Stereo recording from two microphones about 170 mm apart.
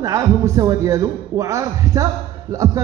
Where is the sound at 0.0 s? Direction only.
20° right (ahead or behind).